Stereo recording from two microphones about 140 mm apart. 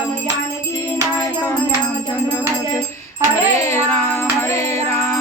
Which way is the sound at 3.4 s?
20° left (ahead or behind).